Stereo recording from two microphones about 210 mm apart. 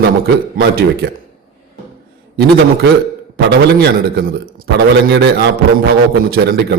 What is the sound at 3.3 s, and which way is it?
A man's voice, 50° right (ahead or behind).